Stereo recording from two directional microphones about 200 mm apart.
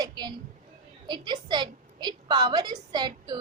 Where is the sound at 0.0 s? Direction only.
20° right (ahead or behind).